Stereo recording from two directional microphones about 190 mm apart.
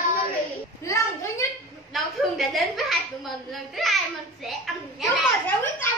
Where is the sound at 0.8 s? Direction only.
15° left (ahead or behind).